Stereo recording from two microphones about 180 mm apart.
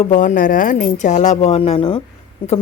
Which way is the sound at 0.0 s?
40° left (ahead or behind).